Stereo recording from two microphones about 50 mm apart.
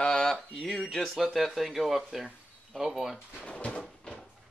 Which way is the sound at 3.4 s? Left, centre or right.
Left.